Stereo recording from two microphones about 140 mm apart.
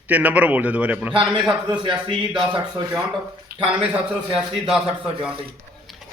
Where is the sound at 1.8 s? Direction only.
35° right (ahead or behind).